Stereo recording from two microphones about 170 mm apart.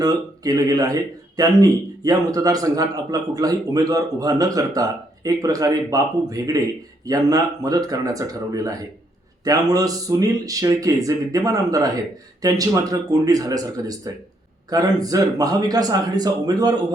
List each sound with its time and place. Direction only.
0.0 s a man's voice: 20° right (ahead or behind)